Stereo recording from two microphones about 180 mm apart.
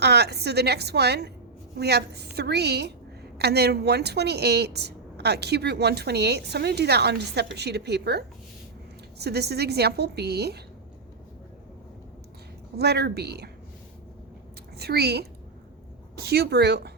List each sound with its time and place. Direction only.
0.0 s a woman's voice: 65° right (ahead or behind)
12.7 s a woman's voice: 65° right (ahead or behind)
14.8 s a woman's voice: 65° right (ahead or behind)